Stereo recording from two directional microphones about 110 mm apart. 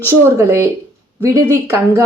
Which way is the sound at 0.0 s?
25° right (ahead or behind).